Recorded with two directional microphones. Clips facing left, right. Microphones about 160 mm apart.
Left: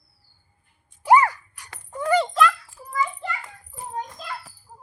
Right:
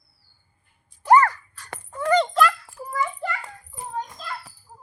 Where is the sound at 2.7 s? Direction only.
60° right (ahead or behind).